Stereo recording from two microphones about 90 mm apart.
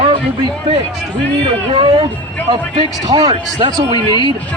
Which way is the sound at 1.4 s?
80° right.